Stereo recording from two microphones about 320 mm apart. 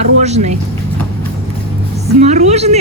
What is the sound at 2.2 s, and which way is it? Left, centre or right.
Speech, right.